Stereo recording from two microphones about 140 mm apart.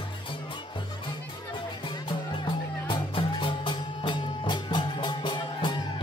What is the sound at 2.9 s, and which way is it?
Music, 35° left (ahead or behind).